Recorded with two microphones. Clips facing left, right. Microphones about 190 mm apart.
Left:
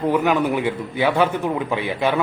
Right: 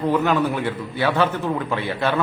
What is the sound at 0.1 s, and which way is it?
A man's voice, 10° left (ahead or behind).